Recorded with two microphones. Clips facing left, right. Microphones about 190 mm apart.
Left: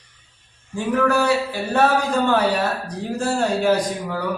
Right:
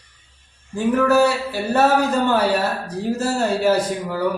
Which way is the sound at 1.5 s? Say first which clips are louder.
Right 2 dB; 5° right (ahead or behind).